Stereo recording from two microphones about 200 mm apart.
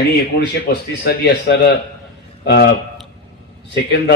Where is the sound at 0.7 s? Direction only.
55° left (ahead or behind).